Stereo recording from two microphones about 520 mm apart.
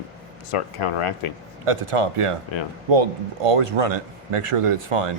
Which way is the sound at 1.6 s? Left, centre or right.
Right.